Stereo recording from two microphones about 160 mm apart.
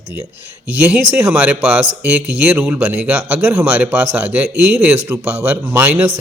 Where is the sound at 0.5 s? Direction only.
10° right (ahead or behind).